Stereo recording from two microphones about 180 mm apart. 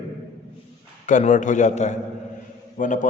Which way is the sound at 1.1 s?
45° left (ahead or behind).